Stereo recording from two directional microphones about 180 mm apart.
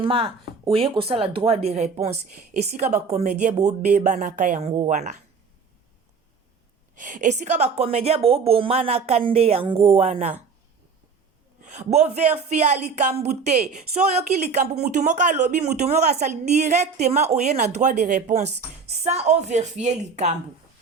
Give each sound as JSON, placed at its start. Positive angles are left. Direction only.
{"t": 0.0, "sound": "speech", "side_deg": -30}
{"t": 6.9, "sound": "speech", "side_deg": -45}
{"t": 11.7, "sound": "speech", "side_deg": -40}